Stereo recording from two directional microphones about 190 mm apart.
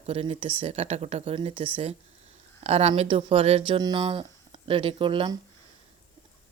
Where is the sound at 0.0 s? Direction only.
30° right (ahead or behind).